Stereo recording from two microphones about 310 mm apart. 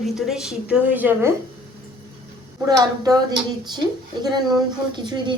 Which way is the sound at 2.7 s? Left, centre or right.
Centre.